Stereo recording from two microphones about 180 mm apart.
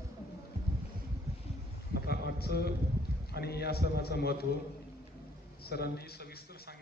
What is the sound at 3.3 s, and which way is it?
A man's voice, 60° left (ahead or behind).